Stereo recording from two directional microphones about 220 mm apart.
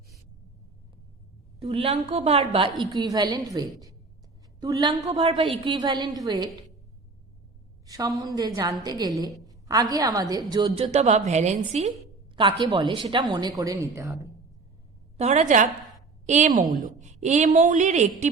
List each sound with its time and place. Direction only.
1.5 s a woman's voice: 25° right (ahead or behind)
7.9 s a woman's voice: 15° right (ahead or behind); by 11.9 s 30° right (ahead or behind)
12.4 s a woman's voice: 20° right (ahead or behind)
15.2 s a woman's voice: 30° right (ahead or behind)